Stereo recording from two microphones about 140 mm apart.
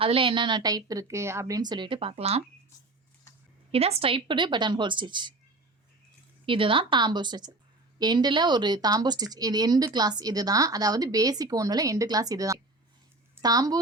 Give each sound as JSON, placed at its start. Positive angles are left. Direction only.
{"t": 0.0, "sound": "a woman's voice", "side_deg": -40}
{"t": 3.7, "sound": "a woman's voice", "side_deg": -45}
{"t": 6.4, "sound": "a woman's voice", "side_deg": -40}